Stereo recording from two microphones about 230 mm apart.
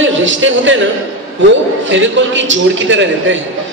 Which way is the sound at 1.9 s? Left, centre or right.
Right.